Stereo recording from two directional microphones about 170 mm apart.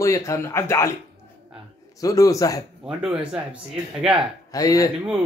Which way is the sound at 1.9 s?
20° left (ahead or behind).